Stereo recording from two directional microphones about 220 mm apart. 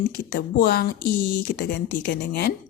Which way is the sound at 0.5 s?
45° left (ahead or behind).